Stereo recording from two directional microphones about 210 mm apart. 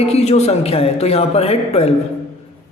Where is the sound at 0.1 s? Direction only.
30° left (ahead or behind).